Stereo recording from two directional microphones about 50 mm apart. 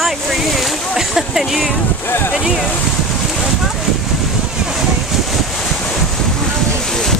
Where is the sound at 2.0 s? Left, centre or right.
Left.